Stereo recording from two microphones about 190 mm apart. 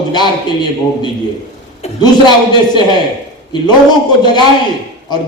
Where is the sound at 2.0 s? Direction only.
20° left (ahead or behind).